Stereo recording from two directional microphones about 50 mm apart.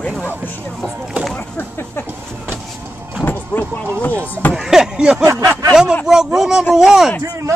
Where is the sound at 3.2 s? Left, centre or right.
Left.